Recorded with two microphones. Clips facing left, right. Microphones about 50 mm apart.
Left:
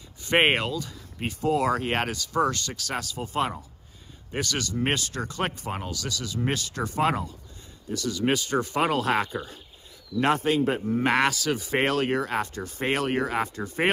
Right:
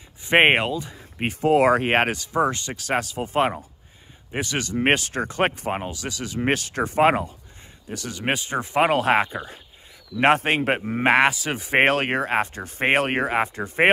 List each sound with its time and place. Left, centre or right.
0.2 s speech: right
10.1 s a man's voice: right
11.1 s speech: right